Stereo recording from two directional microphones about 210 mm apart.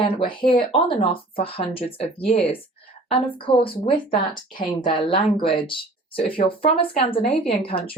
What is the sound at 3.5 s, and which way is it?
Speech, 25° left (ahead or behind).